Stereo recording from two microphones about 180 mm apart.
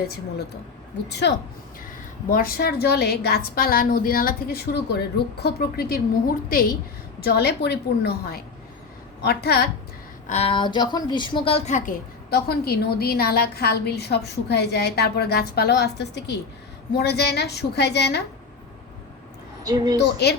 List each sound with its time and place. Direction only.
2.3 s a woman's voice: 55° left (ahead or behind)
10.2 s a woman's voice: 35° left (ahead or behind)
12.3 s a woman's voice: 60° left (ahead or behind)
19.6 s a woman's voice: 20° right (ahead or behind)